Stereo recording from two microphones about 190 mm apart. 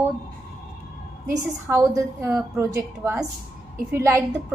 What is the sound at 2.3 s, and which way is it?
Speech, 5° right (ahead or behind).